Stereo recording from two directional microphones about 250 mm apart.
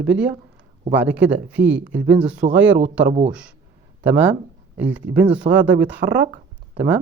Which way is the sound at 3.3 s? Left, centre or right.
Centre.